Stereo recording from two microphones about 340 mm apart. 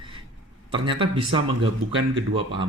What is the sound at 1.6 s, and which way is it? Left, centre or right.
Speech, right.